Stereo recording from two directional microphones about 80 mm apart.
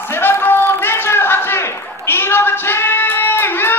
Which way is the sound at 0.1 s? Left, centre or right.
Left.